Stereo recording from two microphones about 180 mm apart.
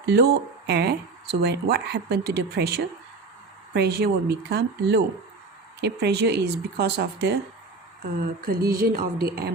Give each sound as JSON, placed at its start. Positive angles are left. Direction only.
{"t": 0.0, "sound": "speech", "side_deg": -65}
{"t": 8.2, "sound": "speech", "side_deg": -55}